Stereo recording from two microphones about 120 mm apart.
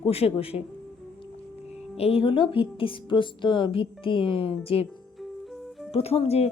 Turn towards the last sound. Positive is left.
turn(degrees=55)  # may be behind; listen again after turning